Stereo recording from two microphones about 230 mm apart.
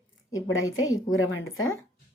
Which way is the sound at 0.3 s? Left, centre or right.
Left.